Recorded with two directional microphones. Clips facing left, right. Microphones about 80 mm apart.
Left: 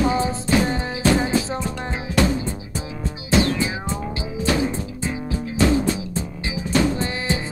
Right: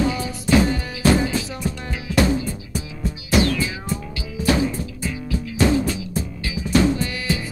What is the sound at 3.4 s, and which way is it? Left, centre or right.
Music, left.